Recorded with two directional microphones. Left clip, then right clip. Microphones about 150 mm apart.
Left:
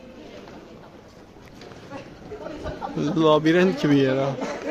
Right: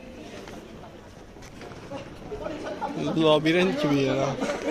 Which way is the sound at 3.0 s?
40° left (ahead or behind).